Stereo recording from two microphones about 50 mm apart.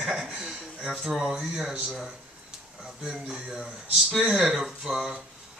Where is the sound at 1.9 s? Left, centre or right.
Centre.